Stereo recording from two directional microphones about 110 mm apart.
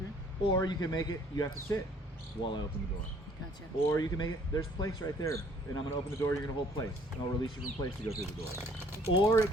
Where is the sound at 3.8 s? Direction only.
30° left (ahead or behind).